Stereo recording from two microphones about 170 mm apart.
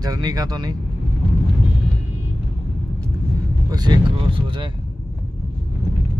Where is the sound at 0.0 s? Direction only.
25° right (ahead or behind).